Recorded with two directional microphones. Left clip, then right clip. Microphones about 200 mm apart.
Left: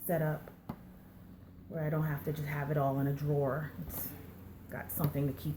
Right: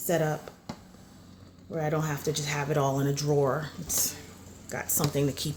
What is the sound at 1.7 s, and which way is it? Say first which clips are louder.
A woman's voice: right 7 dB; 45° right (ahead or behind).